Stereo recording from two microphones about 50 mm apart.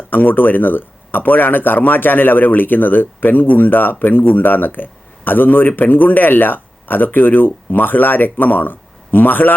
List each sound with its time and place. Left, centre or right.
0.1 s speech: left